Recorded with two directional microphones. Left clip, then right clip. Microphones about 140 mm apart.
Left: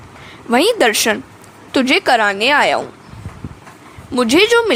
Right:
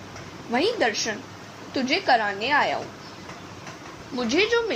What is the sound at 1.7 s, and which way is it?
A woman's voice, 90° left.